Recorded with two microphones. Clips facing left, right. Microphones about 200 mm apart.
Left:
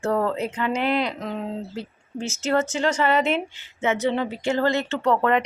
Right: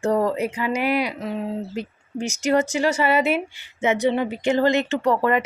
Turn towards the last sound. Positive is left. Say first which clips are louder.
# right 1 dB
turn(degrees=-5)  # may be behind; listen again after turning